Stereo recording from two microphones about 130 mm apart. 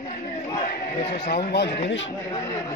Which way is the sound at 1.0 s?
50° left (ahead or behind).